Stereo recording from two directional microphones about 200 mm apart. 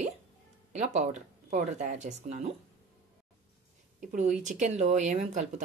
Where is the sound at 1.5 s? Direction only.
35° right (ahead or behind).